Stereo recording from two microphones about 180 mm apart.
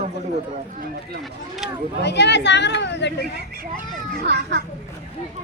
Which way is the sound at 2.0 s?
75° left (ahead or behind).